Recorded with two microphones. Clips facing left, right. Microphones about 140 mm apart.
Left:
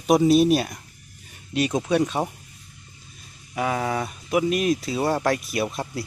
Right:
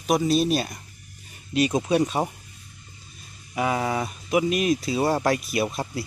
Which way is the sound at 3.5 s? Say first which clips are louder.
Even; 15° right (ahead or behind).